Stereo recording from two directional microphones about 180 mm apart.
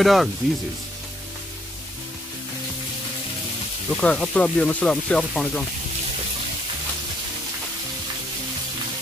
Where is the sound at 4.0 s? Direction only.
5° left (ahead or behind).